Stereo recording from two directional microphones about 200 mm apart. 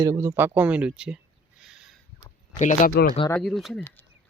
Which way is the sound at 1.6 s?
5° right (ahead or behind).